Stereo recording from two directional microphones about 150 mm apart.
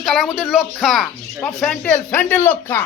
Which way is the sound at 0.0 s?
Centre (ahead or behind).